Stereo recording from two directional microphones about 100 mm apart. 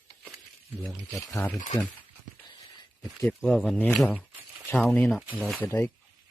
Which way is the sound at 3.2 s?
10° left (ahead or behind).